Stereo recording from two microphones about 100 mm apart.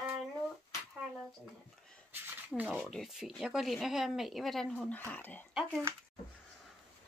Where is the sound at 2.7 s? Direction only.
Centre (ahead or behind); by 5.5 s 15° left (ahead or behind).